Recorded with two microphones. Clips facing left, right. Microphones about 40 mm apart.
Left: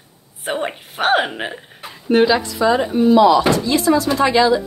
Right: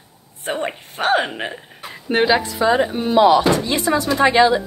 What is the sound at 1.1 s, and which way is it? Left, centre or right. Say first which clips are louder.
Speech: left 1 dB; centre.